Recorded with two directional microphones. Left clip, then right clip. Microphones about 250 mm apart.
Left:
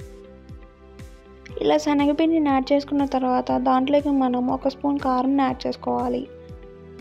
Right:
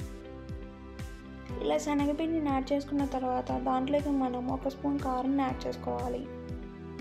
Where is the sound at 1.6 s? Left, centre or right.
Left.